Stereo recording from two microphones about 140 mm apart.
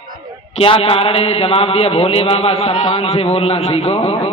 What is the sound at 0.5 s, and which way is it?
A man's voice, 45° left (ahead or behind).